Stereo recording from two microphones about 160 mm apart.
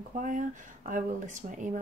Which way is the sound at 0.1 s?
55° right (ahead or behind).